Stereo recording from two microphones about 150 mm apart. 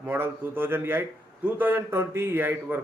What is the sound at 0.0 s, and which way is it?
Speech, 15° right (ahead or behind).